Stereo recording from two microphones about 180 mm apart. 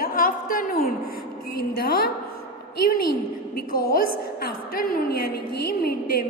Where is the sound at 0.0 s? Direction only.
50° left (ahead or behind).